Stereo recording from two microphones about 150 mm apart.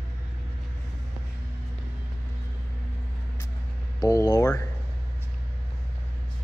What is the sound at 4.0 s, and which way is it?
Speech, 25° left (ahead or behind).